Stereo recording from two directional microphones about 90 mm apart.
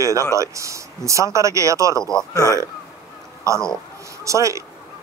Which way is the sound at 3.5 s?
35° right (ahead or behind).